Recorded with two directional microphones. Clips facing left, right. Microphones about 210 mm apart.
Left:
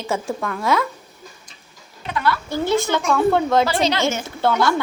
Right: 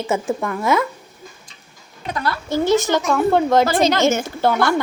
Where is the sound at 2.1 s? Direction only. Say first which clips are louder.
Left 2 dB; 40° right (ahead or behind).